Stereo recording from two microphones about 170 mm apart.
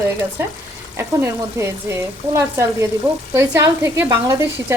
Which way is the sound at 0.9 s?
15° right (ahead or behind).